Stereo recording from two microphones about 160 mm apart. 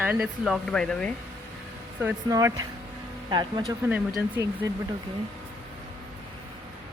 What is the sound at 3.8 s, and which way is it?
Speech, 5° right (ahead or behind).